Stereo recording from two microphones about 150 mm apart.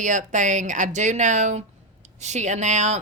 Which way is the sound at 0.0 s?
55° right (ahead or behind).